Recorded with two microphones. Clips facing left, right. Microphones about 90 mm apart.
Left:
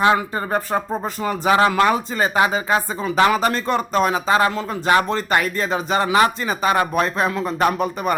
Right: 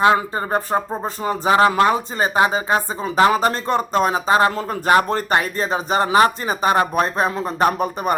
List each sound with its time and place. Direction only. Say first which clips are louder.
0.0 s speech: right 1 dB; 30° right (ahead or behind)
5.3 s speech: left 1 dB; 30° right (ahead or behind)